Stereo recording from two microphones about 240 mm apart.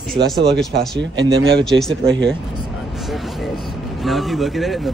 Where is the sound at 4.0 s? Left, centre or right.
Centre.